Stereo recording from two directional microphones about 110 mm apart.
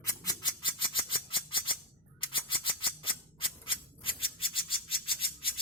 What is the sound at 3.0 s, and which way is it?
Scissors, 50° left (ahead or behind).